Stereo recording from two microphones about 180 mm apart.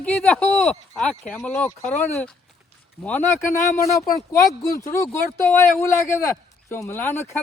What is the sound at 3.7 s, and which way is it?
Speech, 15° left (ahead or behind).